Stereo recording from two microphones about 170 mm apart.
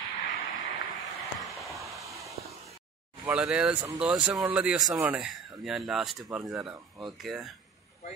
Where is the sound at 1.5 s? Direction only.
Centre (ahead or behind).